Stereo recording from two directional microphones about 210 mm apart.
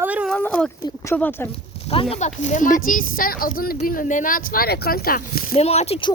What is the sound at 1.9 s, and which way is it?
Speech, 25° left (ahead or behind).